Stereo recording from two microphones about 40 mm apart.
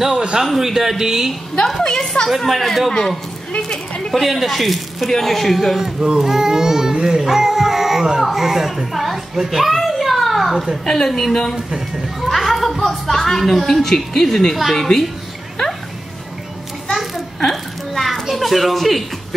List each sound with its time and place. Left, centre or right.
0.1 s a sound: right
0.6 s speech: centre
1.8 s a woman's voice: centre
2.2 s speech: centre
4.1 s speech: centre
5.8 s speech: centre
6.1 s music: centre
9.3 s speech: centre
9.7 s a sound: centre
11.1 s speech: centre
12.2 s a sound: centre
13.8 s speech: centre
16.8 s a sound: centre
18.3 s a child's voice: centre